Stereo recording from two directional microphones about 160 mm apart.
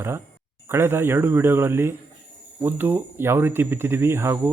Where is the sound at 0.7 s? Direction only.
15° right (ahead or behind).